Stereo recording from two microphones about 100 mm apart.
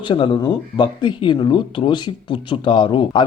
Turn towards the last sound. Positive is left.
turn(degrees=60)  # may be behind; listen again after turning